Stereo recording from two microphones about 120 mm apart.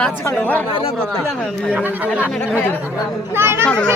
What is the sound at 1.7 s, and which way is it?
Speech, 15° right (ahead or behind).